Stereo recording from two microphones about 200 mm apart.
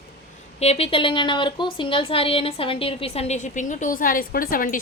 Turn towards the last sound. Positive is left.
turn(degrees=45)  # may be behind; listen again after turning